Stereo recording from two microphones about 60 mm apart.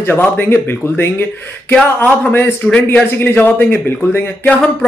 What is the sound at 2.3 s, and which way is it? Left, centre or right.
Speech, left.